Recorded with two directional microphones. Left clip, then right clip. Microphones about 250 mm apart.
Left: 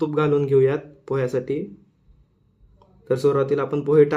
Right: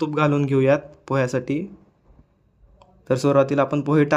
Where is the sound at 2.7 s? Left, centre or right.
Right.